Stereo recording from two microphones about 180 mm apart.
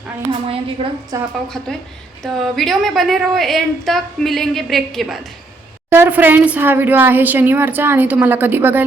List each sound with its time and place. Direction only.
0.3 s a woman's voice: 30° right (ahead or behind)
1.5 s a woman's voice: centre (ahead or behind)
5.9 s a woman's voice: 10° right (ahead or behind)